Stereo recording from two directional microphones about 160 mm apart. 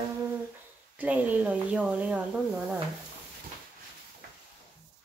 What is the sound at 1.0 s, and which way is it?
Speech, 10° right (ahead or behind).